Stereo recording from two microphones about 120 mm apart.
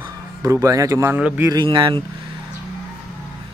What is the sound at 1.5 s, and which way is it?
Speech, 40° right (ahead or behind).